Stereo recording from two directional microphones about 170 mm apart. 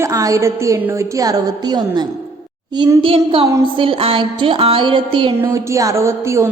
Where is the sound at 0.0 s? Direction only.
20° right (ahead or behind).